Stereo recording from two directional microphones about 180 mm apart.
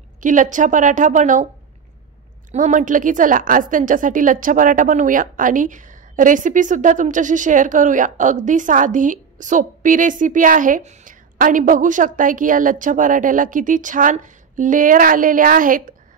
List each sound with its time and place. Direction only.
0.2 s a woman's voice: 45° right (ahead or behind)
2.5 s a woman's voice: 45° right (ahead or behind)